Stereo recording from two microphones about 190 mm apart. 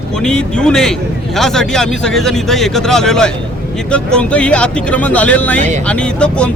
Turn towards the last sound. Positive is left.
turn(degrees=5)  # may be behind; listen again after turning